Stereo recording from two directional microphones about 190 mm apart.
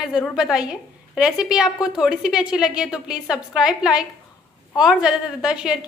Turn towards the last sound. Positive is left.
turn(degrees=-5)  # may be behind; listen again after turning